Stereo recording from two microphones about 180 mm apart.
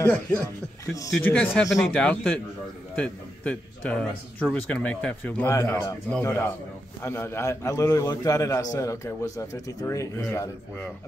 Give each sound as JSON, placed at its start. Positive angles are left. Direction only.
{"t": 0.0, "sound": "speech", "side_deg": 10}